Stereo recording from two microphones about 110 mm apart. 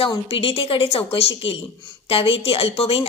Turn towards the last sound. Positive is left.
turn(degrees=60)  # may be behind; listen again after turning